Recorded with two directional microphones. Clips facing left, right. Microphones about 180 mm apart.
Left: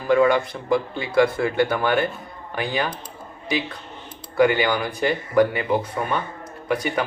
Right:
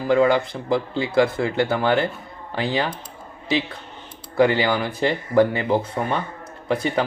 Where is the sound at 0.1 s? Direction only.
25° right (ahead or behind).